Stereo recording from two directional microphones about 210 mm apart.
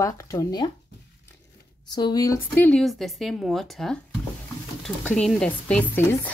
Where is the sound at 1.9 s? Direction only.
20° left (ahead or behind).